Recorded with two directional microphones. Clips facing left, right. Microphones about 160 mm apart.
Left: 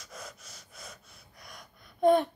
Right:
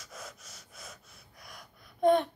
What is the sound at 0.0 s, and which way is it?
Gasp, centre (ahead or behind).